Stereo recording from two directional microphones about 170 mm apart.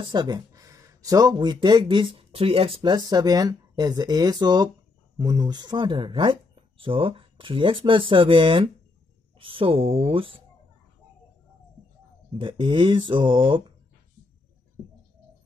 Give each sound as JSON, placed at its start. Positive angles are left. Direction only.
{"t": 0.0, "sound": "speech", "side_deg": -25}
{"t": 12.3, "sound": "speech", "side_deg": -30}